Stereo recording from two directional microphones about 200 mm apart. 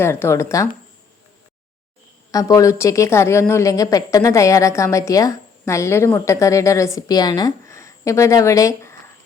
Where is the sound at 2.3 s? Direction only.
15° left (ahead or behind).